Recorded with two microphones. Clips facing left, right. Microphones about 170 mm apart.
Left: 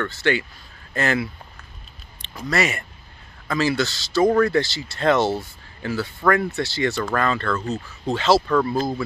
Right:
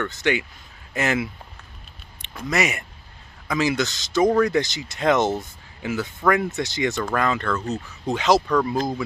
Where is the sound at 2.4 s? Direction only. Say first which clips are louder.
Left 1 dB; 20° right (ahead or behind).